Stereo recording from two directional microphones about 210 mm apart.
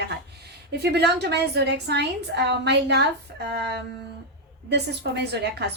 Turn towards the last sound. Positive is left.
turn(degrees=-50)  # may be behind; listen again after turning